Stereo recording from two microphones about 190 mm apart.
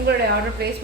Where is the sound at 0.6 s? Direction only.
55° right (ahead or behind).